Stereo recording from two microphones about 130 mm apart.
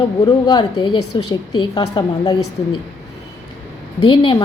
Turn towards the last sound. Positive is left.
turn(degrees=40)  # may be behind; listen again after turning